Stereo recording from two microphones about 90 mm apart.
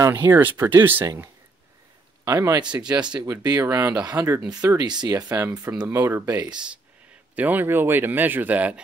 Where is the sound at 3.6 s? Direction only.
30° right (ahead or behind).